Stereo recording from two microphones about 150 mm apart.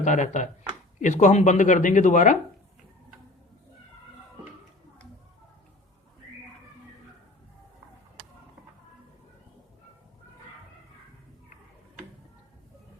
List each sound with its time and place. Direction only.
0.0 s speech: 55° left (ahead or behind)